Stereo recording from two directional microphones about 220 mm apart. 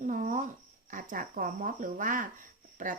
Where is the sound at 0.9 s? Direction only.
40° right (ahead or behind).